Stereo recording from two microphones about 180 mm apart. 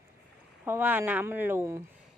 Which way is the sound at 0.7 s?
10° right (ahead or behind).